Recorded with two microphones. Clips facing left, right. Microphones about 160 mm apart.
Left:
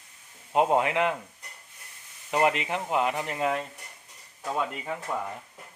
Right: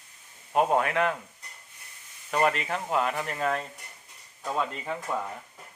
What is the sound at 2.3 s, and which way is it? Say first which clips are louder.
Speech: left 1 dB; 20° left (ahead or behind).